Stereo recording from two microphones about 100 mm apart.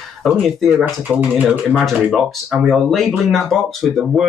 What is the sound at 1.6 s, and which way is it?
Speech, 5° right (ahead or behind).